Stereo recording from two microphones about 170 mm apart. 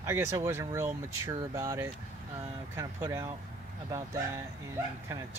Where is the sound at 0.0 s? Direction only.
15° right (ahead or behind).